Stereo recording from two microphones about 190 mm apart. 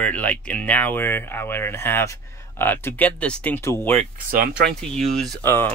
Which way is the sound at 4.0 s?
45° right (ahead or behind).